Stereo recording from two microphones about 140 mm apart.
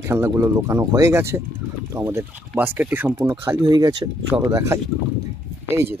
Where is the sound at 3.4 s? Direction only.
20° right (ahead or behind).